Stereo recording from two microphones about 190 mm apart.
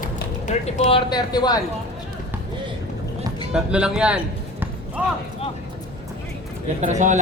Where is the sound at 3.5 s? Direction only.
5° right (ahead or behind).